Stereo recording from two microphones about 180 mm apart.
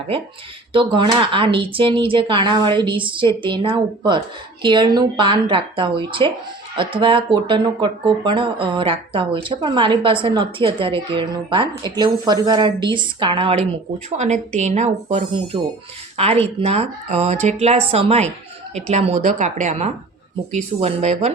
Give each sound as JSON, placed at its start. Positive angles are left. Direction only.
{"t": 0.7, "sound": "speech", "side_deg": -30}